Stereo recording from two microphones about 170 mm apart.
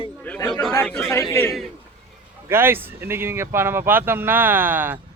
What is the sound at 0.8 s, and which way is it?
Speech, 15° left (ahead or behind).